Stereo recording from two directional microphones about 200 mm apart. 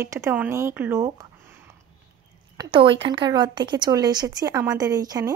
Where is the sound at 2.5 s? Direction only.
25° right (ahead or behind).